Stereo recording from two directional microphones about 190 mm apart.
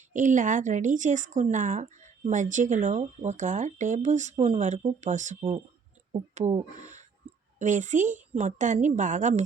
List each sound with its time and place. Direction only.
0.1 s speech: 40° right (ahead or behind)
7.6 s speech: 40° right (ahead or behind)